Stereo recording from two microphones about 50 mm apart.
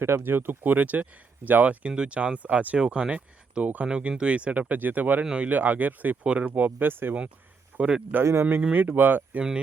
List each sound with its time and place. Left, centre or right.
0.0 s speech: right
2.7 s speech: centre
3.8 s speech: centre; by 5.2 s right
5.2 s speech: centre
5.5 s speech: right
6.2 s speech: right
6.7 s speech: right
7.8 s speech: centre
8.2 s speech: right
8.7 s speech: right